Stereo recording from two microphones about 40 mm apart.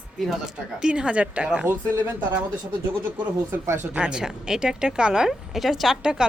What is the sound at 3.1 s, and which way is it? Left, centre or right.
Speech, right.